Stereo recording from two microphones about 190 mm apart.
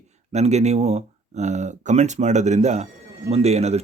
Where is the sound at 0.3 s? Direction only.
35° right (ahead or behind).